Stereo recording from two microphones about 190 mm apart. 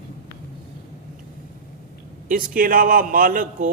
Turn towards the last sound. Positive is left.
turn(degrees=-45)  # may be behind; listen again after turning